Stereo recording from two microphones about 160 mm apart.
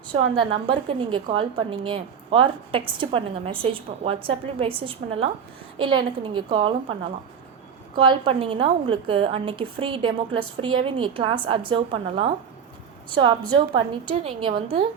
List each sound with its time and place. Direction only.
0.1 s a woman's voice: 30° right (ahead or behind)
7.9 s a woman's voice: 35° right (ahead or behind)